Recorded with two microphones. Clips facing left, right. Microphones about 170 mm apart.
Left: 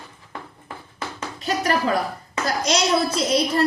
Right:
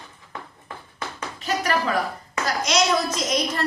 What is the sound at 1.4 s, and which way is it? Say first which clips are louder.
A woman's voice: left 2 dB; 35° left (ahead or behind).